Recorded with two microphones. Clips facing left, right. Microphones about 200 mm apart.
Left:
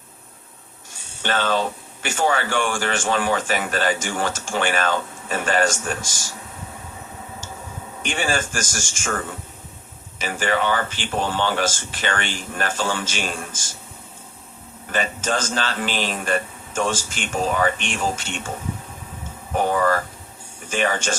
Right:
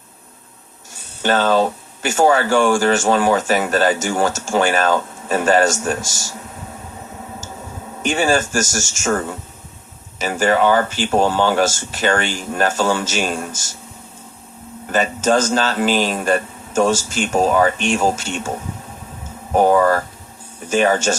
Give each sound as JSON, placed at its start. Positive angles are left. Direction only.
{"t": 1.2, "sound": "speech", "side_deg": -40}
{"t": 8.0, "sound": "speech", "side_deg": -40}
{"t": 14.9, "sound": "speech", "side_deg": -40}
{"t": 19.5, "sound": "speech", "side_deg": -40}